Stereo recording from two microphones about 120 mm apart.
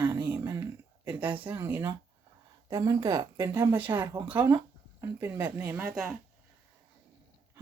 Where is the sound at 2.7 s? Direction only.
35° right (ahead or behind).